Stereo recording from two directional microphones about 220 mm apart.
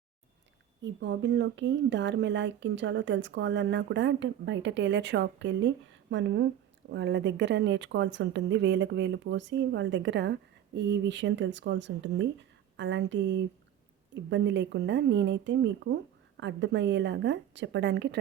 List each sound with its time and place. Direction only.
0.8 s speech: 55° right (ahead or behind)